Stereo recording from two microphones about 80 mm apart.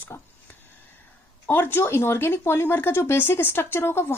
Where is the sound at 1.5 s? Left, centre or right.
Left.